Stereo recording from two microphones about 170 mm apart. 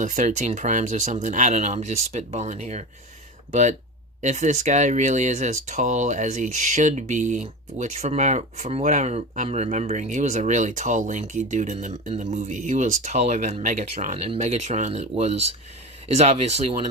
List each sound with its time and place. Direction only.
0.0 s speech: 45° right (ahead or behind)